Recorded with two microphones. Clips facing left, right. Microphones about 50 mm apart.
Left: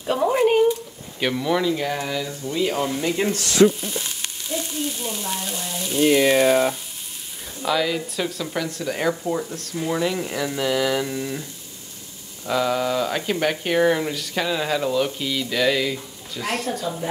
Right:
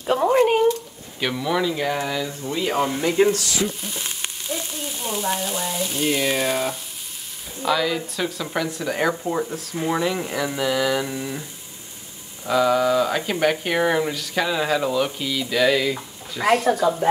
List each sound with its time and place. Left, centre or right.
0.0 s a sound: centre
1.2 s speech: centre
2.4 s speech: right
3.8 s speech: centre
4.6 s frying: centre
7.6 s speech: centre
12.4 s speech: centre